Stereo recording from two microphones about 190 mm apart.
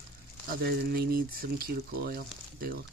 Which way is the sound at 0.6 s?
55° right (ahead or behind).